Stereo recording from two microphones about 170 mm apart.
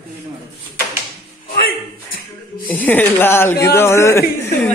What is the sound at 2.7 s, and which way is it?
A man's voice, 10° left (ahead or behind).